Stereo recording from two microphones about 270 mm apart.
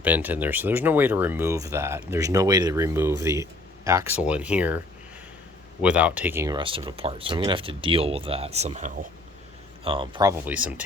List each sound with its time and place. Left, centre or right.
0.0 s speech: centre
5.8 s speech: centre